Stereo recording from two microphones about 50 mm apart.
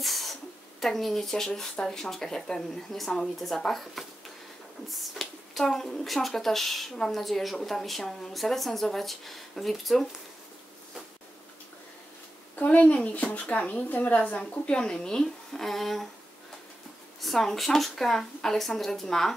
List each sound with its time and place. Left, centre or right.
0.0 s speech: centre
12.5 s a woman's voice: left
14.2 s speech: left; by 16.1 s centre
17.2 s speech: centre